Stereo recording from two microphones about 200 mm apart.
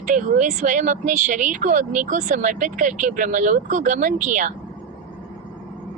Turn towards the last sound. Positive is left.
turn(degrees=-40)  # may be behind; listen again after turning